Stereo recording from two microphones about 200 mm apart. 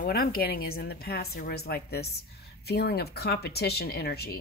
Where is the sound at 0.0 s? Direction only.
45° left (ahead or behind).